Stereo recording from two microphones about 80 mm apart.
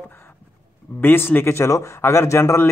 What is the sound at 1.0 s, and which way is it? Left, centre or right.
Speech, left.